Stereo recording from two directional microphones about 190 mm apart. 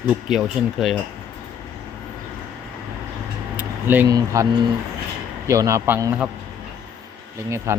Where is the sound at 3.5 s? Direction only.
10° right (ahead or behind).